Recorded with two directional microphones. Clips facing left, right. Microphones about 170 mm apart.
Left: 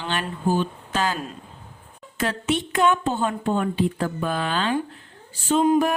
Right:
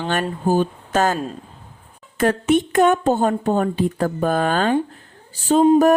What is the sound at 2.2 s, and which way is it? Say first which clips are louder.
Speech: right 7 dB; 50° right (ahead or behind).